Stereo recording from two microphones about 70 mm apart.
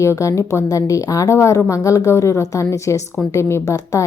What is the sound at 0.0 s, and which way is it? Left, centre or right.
A woman's voice, left.